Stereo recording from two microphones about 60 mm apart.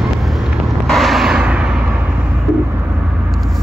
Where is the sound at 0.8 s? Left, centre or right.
Centre.